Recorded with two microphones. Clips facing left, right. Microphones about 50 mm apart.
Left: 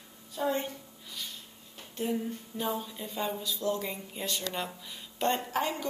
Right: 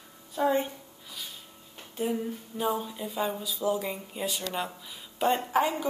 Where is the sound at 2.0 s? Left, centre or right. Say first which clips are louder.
Right 2 dB; centre.